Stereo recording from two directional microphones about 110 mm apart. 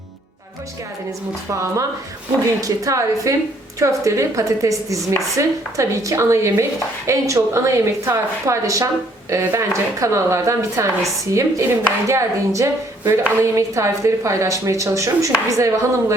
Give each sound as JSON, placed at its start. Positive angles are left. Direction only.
{"t": 1.5, "sound": "a woman's voice", "side_deg": -25}